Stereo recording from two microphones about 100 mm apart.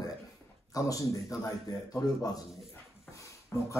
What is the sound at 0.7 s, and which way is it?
Speech, 35° left (ahead or behind).